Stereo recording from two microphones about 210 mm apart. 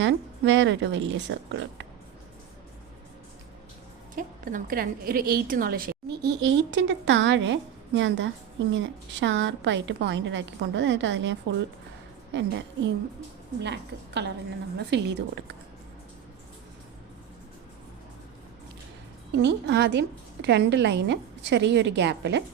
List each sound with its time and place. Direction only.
0.0 s a woman's voice: 60° right (ahead or behind)
4.1 s a woman's voice: 40° right (ahead or behind); by 15.5 s 55° right (ahead or behind)
19.4 s a woman's voice: 55° right (ahead or behind)